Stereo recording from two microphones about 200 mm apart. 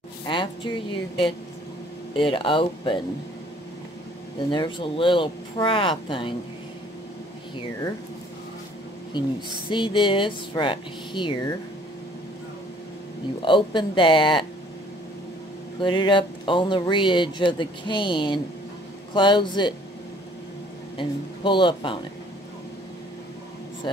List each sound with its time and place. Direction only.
0.3 s a woman's voice: 25° left (ahead or behind)
4.5 s speech: 25° left (ahead or behind)
9.7 s speech: 25° left (ahead or behind)
13.4 s speech: 25° left (ahead or behind)
15.8 s speech: 20° left (ahead or behind)
21.0 s speech: 25° left (ahead or behind)